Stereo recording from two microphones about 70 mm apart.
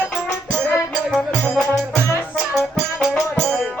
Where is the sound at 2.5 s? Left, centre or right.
Centre.